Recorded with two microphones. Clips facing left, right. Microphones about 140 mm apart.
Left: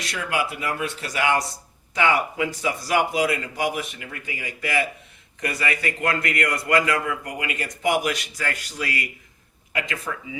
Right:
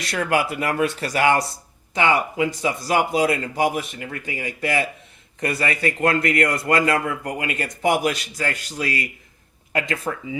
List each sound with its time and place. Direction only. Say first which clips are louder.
0.1 s speech: right 5 dB; 45° right (ahead or behind)
1.0 s speech: right 2 dB; 40° right (ahead or behind)
2.0 s speech: right 2 dB; 25° right (ahead or behind)
5.5 s speech: right 3 dB; 50° right (ahead or behind)
5.8 s speech: right 8 dB; 35° right (ahead or behind)
6.9 s speech: right 3 dB; 45° right (ahead or behind)